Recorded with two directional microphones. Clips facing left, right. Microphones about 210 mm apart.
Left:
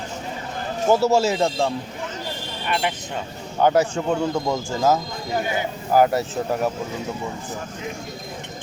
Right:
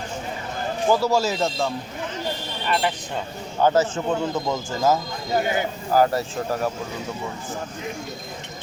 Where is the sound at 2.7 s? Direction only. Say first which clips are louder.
Right 1 dB; 10° left (ahead or behind).